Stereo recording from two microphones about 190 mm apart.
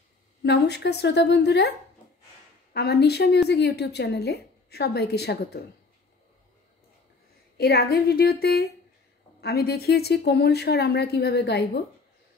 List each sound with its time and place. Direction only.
0.4 s a woman's voice: 60° left (ahead or behind)
2.7 s a woman's voice: 55° left (ahead or behind)
7.5 s a woman's voice: 55° left (ahead or behind)